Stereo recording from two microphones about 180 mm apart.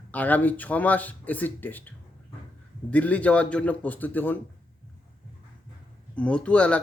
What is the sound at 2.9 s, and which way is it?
A man's voice, 5° left (ahead or behind).